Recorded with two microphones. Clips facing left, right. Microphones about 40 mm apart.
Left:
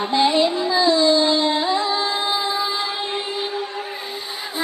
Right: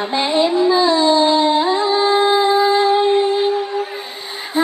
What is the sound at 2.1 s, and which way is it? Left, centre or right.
Music, right.